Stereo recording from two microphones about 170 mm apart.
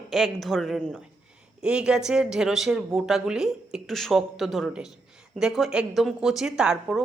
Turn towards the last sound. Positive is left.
turn(degrees=-5)  # may be behind; listen again after turning